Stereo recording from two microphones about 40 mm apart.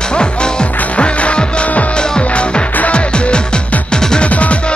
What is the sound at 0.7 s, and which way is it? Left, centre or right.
Music, left.